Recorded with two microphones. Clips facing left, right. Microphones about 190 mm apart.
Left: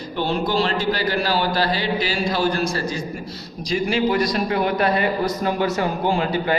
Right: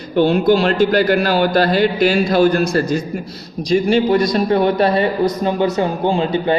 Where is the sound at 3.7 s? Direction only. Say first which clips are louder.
Right 6 dB; 40° right (ahead or behind).